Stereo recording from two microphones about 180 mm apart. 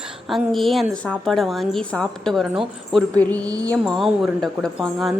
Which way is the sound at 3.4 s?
20° right (ahead or behind).